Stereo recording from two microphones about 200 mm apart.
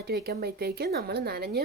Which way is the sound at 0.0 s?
50° right (ahead or behind).